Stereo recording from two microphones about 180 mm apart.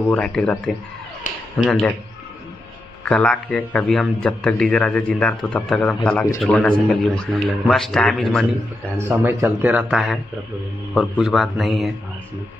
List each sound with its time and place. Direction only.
0.1 s a man's voice: 5° left (ahead or behind)
3.1 s a man's voice: 5° left (ahead or behind)
8.9 s a man's voice: 15° right (ahead or behind)